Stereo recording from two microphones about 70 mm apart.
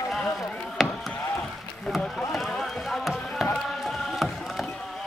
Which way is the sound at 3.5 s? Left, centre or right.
Centre.